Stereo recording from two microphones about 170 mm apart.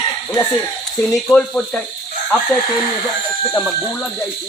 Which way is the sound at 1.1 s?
5° left (ahead or behind).